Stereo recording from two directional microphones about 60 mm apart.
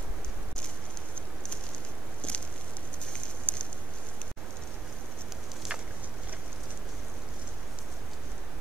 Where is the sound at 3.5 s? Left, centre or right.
Left.